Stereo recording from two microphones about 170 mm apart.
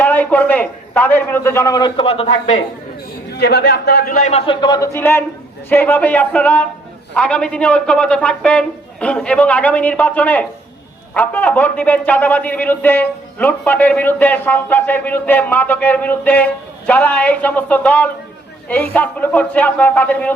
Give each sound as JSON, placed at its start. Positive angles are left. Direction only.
{"t": 0.0, "sound": "a man's voice", "side_deg": 10}
{"t": 3.3, "sound": "speech", "side_deg": 80}
{"t": 4.3, "sound": "a man's voice", "side_deg": 35}